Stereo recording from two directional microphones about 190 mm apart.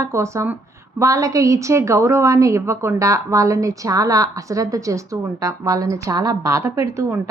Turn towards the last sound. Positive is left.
turn(degrees=-15)  # may be behind; listen again after turning